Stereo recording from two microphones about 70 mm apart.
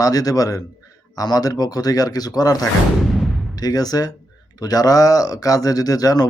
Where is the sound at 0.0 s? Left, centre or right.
Left.